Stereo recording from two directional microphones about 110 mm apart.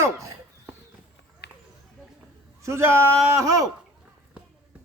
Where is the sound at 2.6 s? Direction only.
25° right (ahead or behind).